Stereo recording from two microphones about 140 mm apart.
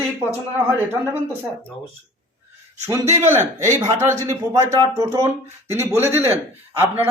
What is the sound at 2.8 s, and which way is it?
A man's voice, 20° right (ahead or behind).